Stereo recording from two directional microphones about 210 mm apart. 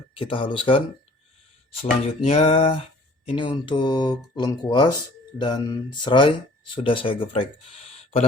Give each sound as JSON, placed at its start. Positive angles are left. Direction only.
{"t": 0.1, "sound": "speech", "side_deg": 25}
{"t": 1.8, "sound": "speech", "side_deg": 30}